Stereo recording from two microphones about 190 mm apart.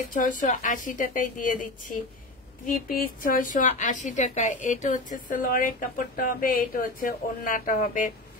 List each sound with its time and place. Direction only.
0.1 s a woman's voice: 45° left (ahead or behind)